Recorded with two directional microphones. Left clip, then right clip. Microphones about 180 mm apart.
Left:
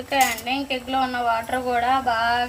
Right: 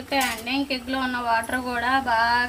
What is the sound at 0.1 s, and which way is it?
Speech, 5° right (ahead or behind).